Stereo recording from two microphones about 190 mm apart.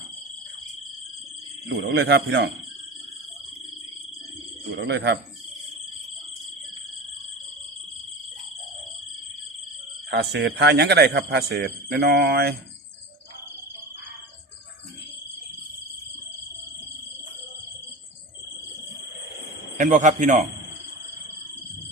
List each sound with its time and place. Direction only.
1.7 s a man's voice: 65° right (ahead or behind)
4.9 s a man's voice: 60° right (ahead or behind)
10.1 s a man's voice: 60° right (ahead or behind)
19.7 s a man's voice: 40° right (ahead or behind)